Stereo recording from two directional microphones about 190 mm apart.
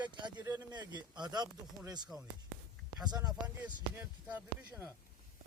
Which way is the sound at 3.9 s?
10° right (ahead or behind).